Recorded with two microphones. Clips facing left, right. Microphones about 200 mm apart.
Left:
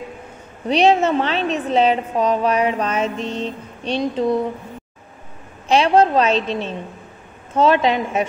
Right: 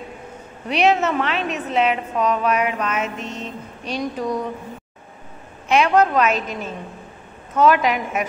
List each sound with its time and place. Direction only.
0.7 s a woman's voice: 30° left (ahead or behind)
5.7 s a woman's voice: 30° left (ahead or behind)